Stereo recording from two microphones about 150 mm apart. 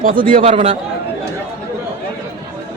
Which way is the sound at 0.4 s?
55° right (ahead or behind).